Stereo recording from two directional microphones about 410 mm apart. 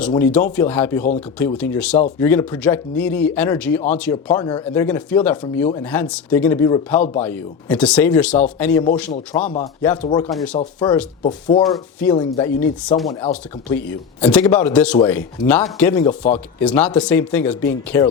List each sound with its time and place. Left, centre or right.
0.0 s speech: centre
2.0 s speech: centre
2.2 s speech: centre
8.9 s a man's voice: centre
9.3 s speech: centre